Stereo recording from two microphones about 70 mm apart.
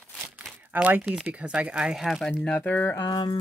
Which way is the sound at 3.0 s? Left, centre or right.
Left.